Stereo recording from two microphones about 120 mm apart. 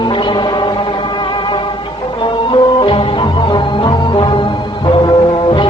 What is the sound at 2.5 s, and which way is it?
Music, 45° left (ahead or behind).